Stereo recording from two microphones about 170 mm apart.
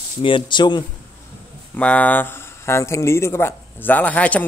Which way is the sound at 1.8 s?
10° left (ahead or behind).